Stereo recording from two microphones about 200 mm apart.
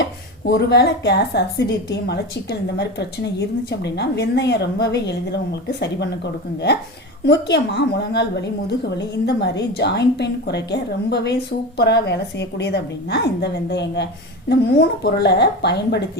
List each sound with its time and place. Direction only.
0.4 s a woman's voice: 55° left (ahead or behind)
7.3 s a woman's voice: 60° left (ahead or behind)